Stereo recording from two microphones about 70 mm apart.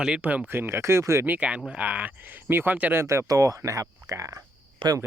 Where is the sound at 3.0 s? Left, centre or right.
Right.